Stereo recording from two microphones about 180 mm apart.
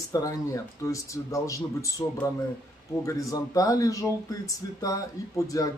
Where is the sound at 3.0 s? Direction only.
20° left (ahead or behind).